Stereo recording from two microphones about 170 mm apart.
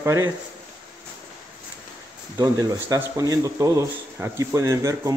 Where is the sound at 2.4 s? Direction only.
20° right (ahead or behind).